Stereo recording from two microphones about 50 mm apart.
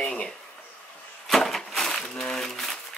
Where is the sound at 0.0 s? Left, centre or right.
Centre.